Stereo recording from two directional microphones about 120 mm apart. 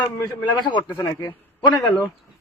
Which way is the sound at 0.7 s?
40° left (ahead or behind).